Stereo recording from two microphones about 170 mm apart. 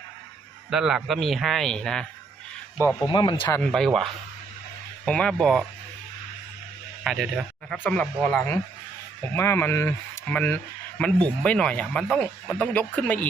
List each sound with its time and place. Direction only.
0.7 s speech: 5° right (ahead or behind)
3.1 s speech: 25° left (ahead or behind)
3.6 s speech: 5° left (ahead or behind)
7.0 s speech: centre (ahead or behind)